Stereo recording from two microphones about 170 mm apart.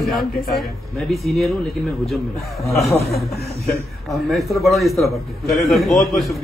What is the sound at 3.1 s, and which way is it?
Speech, 65° left (ahead or behind).